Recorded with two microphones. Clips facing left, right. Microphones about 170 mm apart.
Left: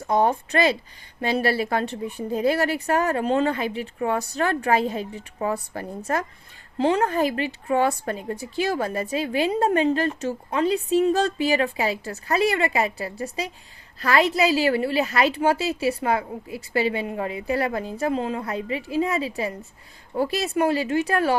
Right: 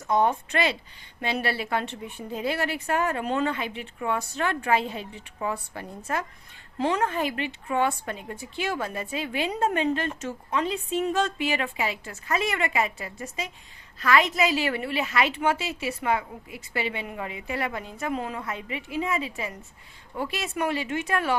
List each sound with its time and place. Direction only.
0.0 s a woman's voice: 35° left (ahead or behind)
6.7 s a woman's voice: 30° left (ahead or behind)